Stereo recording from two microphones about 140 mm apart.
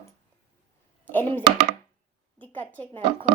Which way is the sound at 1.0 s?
15° left (ahead or behind).